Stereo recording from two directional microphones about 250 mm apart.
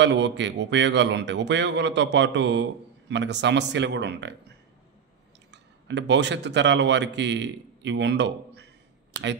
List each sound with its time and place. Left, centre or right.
0.0 s a man's voice: right
5.5 s a man's voice: right